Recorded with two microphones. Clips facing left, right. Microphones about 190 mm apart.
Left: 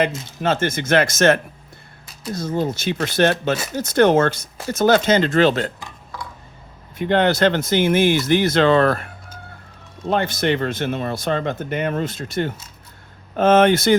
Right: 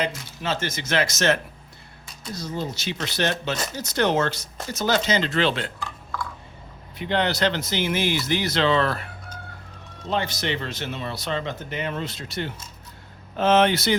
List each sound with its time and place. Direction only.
0.4 s speech: 55° left (ahead or behind)
5.8 s a sound: 15° left (ahead or behind)
7.0 s speech: 50° left (ahead or behind)
10.1 s speech: 55° left (ahead or behind)